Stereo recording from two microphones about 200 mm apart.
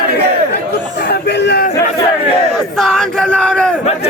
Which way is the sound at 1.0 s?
55° left (ahead or behind).